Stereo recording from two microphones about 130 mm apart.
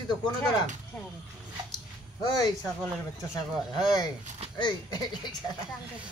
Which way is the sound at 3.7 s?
35° left (ahead or behind).